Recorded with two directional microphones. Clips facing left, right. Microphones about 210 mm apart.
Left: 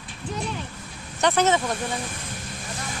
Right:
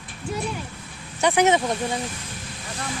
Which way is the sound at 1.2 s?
15° right (ahead or behind).